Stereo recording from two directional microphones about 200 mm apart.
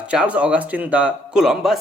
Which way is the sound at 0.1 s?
5° right (ahead or behind).